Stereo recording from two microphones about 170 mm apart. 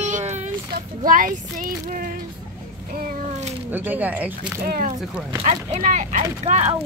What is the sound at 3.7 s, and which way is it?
Speech, 10° right (ahead or behind).